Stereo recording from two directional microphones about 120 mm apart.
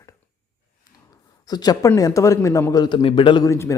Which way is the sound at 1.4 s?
35° left (ahead or behind).